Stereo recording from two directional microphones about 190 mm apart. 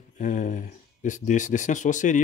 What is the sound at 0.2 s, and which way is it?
Speech, 40° left (ahead or behind).